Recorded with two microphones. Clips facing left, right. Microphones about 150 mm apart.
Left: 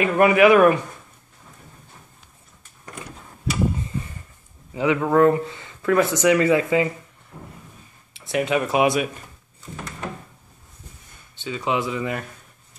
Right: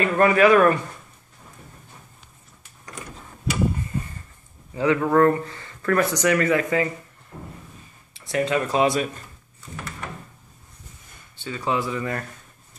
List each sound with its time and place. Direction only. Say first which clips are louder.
0.0 s speech: left 2 dB; 15° left (ahead or behind)
4.7 s speech: even; 15° left (ahead or behind)
6.0 s speech: left 3 dB; 20° left (ahead or behind)
8.3 s speech: left 1 dB; 15° left (ahead or behind)
11.3 s speech: left 1 dB; 15° left (ahead or behind)